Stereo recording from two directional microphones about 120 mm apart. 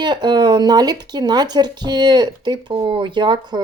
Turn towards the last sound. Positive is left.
turn(degrees=-35)  # may be behind; listen again after turning